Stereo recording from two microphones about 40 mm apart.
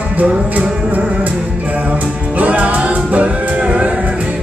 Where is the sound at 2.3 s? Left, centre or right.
Right.